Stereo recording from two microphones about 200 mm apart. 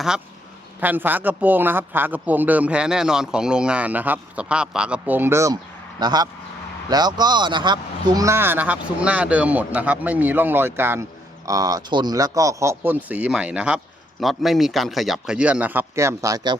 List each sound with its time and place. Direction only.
0.8 s a man's voice: 10° right (ahead or behind)